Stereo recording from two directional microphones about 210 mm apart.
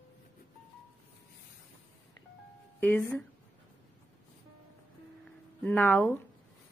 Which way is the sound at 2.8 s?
10° left (ahead or behind).